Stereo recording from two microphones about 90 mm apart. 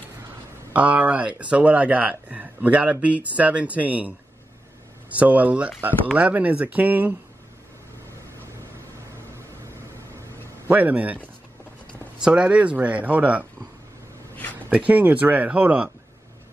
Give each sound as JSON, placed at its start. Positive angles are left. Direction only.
{"t": 0.7, "sound": "speech", "side_deg": -15}
{"t": 5.1, "sound": "speech", "side_deg": -15}
{"t": 10.7, "sound": "speech", "side_deg": -20}
{"t": 14.7, "sound": "speech", "side_deg": -15}